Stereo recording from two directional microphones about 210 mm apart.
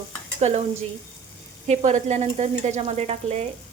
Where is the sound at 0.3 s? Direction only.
30° right (ahead or behind).